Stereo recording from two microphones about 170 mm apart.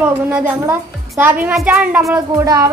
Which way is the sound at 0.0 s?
10° right (ahead or behind).